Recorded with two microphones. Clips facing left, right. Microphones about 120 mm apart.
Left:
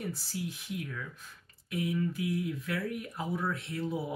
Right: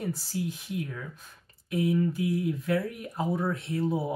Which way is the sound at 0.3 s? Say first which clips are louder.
Right 5 dB; 40° right (ahead or behind).